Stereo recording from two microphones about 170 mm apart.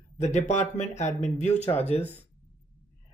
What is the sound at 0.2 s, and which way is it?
Speech, 45° left (ahead or behind).